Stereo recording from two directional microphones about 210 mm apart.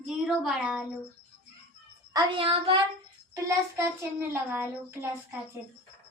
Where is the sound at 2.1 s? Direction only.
25° right (ahead or behind).